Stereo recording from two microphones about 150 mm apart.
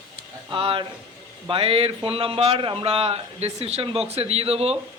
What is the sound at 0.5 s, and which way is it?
A man's voice, 35° right (ahead or behind).